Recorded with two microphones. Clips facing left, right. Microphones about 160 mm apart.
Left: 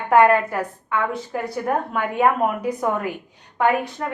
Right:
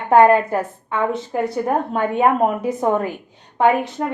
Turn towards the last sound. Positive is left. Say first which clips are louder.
# right 3 dB
turn(degrees=-25)  # may be behind; listen again after turning